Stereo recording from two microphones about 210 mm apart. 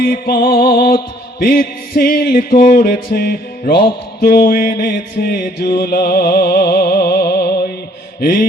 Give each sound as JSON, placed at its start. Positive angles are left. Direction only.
{"t": 0.0, "sound": "music", "side_deg": 45}
{"t": 8.2, "sound": "mantra", "side_deg": 40}